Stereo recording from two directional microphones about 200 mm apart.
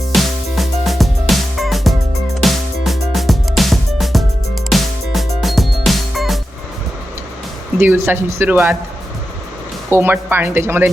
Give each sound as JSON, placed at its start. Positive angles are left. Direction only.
{"t": 0.1, "sound": "music", "side_deg": 0}
{"t": 7.8, "sound": "speech", "side_deg": -10}
{"t": 9.9, "sound": "speech", "side_deg": -10}